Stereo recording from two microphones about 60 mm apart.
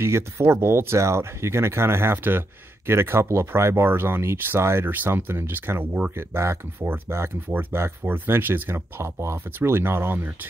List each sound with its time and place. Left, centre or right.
0.0 s speech: right